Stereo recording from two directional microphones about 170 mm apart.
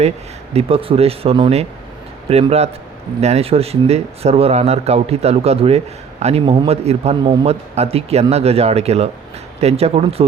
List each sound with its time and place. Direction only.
0.5 s speech: 35° right (ahead or behind)